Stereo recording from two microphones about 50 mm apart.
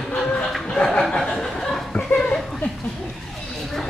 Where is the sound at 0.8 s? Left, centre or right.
Centre.